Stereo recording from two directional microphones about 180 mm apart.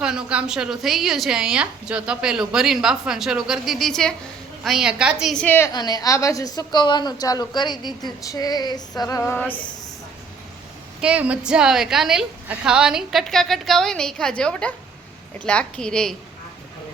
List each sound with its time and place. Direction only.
0.0 s a woman's voice: 5° right (ahead or behind)
11.0 s a woman's voice: 5° right (ahead or behind)